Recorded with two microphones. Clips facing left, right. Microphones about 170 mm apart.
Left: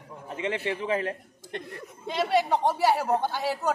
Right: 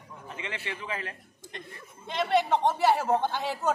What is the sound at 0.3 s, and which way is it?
Speech, 45° left (ahead or behind).